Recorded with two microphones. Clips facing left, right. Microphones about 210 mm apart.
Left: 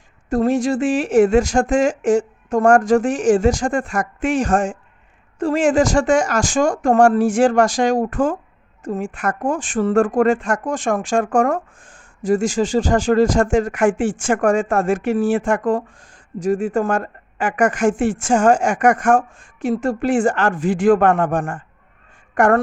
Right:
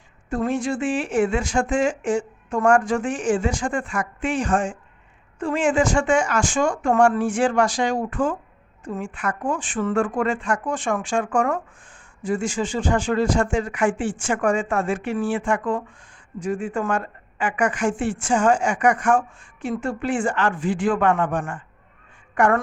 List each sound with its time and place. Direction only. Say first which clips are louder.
0.3 s speech: left 6 dB; 40° left (ahead or behind)